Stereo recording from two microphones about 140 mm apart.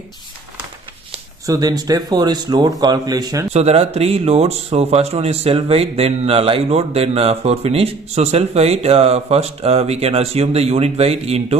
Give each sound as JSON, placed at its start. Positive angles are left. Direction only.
{"t": 1.4, "sound": "a man's voice", "side_deg": -25}
{"t": 3.5, "sound": "speech", "side_deg": -50}